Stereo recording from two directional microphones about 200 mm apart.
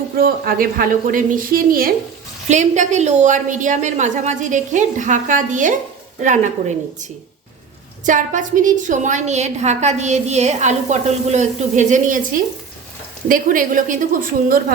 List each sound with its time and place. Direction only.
0.2 s a woman's voice: 45° right (ahead or behind)
8.0 s a woman's voice: 40° right (ahead or behind)